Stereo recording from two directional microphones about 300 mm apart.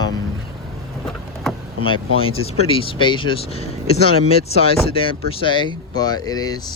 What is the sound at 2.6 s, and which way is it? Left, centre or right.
Speech, centre.